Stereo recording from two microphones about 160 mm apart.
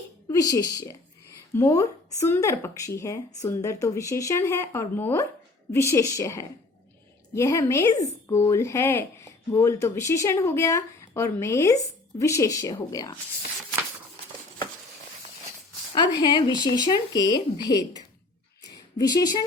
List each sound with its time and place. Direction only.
0.3 s speech: 20° left (ahead or behind)
16.0 s speech: 30° left (ahead or behind)
18.9 s speech: 25° left (ahead or behind)